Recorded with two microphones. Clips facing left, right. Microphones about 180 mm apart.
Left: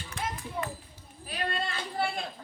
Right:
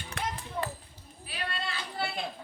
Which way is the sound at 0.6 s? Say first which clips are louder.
Right 1 dB; 5° left (ahead or behind).